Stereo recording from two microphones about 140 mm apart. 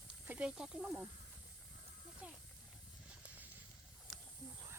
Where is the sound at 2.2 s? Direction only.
10° right (ahead or behind).